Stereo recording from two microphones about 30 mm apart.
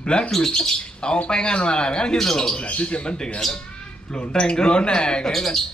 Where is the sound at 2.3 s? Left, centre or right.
Centre.